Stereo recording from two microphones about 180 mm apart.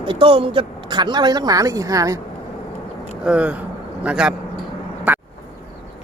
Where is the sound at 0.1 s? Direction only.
30° right (ahead or behind).